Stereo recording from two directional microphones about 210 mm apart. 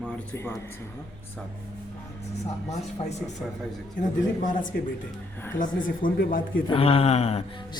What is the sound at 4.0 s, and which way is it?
Speech, 40° left (ahead or behind).